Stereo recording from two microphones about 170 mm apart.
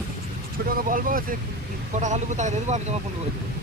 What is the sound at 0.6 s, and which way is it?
Speech, 55° right (ahead or behind).